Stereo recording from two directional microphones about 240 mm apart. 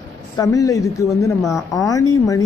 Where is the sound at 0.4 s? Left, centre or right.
Centre.